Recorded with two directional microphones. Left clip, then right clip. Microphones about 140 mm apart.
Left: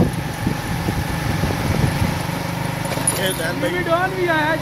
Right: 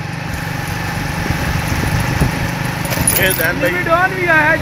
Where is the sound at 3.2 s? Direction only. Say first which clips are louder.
Right 8 dB; 15° right (ahead or behind).